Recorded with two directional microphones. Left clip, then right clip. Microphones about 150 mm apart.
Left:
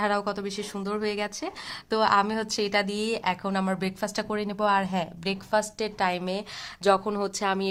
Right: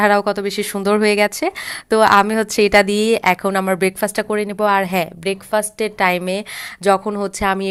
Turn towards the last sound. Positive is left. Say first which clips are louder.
# right 8 dB
turn(degrees=-25)  # may be behind; listen again after turning